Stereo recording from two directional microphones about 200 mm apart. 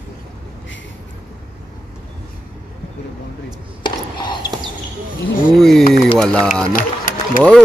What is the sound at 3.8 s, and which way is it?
Chopping, 20° left (ahead or behind).